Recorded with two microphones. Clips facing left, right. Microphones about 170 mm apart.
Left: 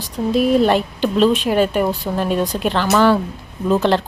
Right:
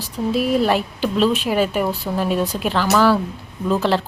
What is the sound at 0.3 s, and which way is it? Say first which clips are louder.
A woman's voice: left 3 dB; 5° right (ahead or behind).